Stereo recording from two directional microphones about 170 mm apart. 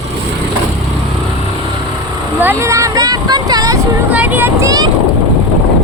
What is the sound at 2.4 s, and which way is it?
Speech, 15° right (ahead or behind).